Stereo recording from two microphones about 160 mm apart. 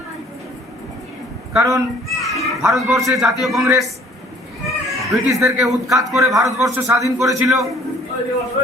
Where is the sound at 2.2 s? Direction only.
Centre (ahead or behind).